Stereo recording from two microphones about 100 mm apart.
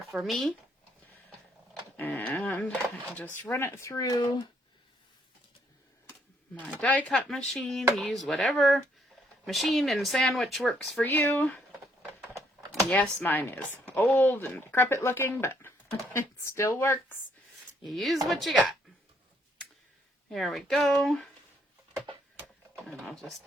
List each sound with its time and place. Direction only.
0.1 s speech: centre (ahead or behind)
2.0 s speech: 15° left (ahead or behind)
3.5 s speech: 25° left (ahead or behind); by 4.4 s 45° left (ahead or behind)
6.7 s speech: 15° left (ahead or behind)
11.0 s speech: 20° left (ahead or behind)
12.9 s speech: 15° left (ahead or behind)
17.8 s speech: centre (ahead or behind)
20.3 s speech: centre (ahead or behind)
22.7 s a sound: 5° left (ahead or behind)